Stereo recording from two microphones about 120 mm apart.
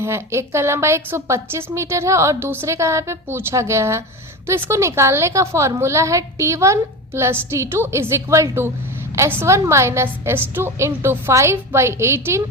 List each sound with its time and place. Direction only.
0.0 s a woman's voice: 20° right (ahead or behind)